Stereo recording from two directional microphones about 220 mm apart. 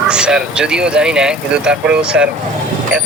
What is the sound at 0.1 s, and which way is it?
Speech, 5° right (ahead or behind).